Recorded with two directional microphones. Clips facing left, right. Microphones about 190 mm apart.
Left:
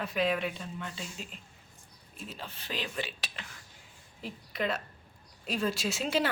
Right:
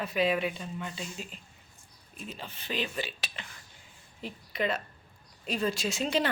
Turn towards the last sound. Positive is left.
turn(degrees=5)  # may be behind; listen again after turning